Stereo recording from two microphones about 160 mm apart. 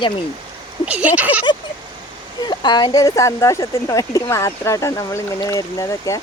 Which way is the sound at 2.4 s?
30° left (ahead or behind).